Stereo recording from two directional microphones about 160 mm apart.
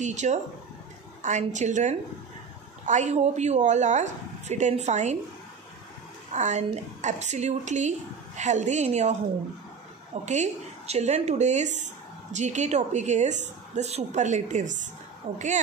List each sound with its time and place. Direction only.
0.0 s speech: 45° right (ahead or behind)
6.3 s speech: 45° right (ahead or behind)
10.2 s speech: 45° right (ahead or behind)